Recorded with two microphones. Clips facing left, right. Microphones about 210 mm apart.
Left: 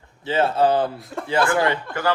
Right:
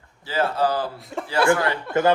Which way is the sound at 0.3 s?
25° left (ahead or behind).